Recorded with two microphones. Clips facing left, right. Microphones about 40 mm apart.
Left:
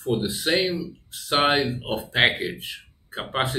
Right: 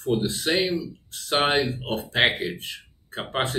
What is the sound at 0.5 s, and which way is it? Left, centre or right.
Speech, centre.